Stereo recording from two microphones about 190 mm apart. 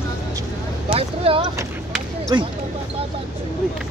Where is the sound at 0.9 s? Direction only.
30° right (ahead or behind).